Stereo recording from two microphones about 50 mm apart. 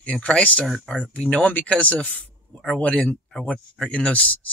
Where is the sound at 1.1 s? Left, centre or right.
Left.